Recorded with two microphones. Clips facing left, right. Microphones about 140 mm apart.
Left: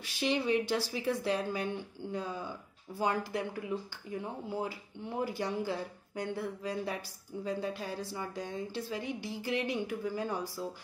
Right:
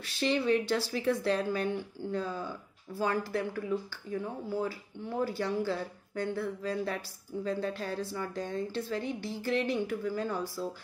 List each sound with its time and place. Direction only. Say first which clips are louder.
0.0 s speech: right 2 dB; 15° left (ahead or behind)